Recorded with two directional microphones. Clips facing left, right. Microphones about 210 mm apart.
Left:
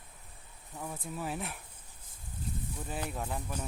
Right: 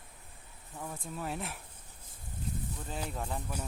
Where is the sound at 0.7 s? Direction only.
Centre (ahead or behind).